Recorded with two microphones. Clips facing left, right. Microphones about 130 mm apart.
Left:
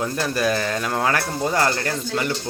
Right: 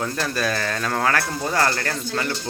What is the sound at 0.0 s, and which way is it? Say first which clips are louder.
Speech: left 2 dB; 20° left (ahead or behind).